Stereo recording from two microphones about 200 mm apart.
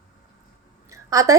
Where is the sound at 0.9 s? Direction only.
15° right (ahead or behind).